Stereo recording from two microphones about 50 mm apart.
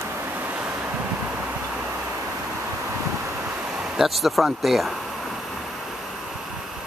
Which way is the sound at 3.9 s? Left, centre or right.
Centre.